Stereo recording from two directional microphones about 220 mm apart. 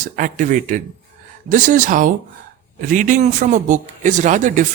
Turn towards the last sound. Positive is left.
turn(degrees=-35)  # may be behind; listen again after turning